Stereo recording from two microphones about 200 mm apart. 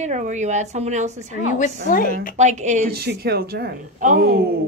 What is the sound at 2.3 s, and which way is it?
Speech, 35° right (ahead or behind).